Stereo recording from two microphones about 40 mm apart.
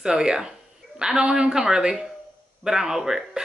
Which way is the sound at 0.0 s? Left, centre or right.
Centre.